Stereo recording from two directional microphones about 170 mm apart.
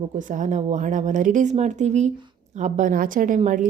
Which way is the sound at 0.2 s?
50° right (ahead or behind).